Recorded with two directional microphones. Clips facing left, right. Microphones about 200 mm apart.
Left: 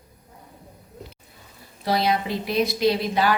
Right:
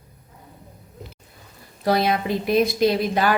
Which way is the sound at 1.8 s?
50° right (ahead or behind).